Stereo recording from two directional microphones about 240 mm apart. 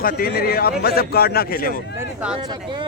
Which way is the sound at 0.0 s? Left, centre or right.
Left.